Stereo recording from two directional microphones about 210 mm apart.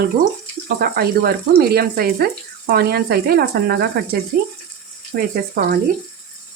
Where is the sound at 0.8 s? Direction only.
45° right (ahead or behind).